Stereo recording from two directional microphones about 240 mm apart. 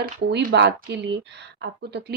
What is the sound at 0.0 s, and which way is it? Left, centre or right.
Speech, right.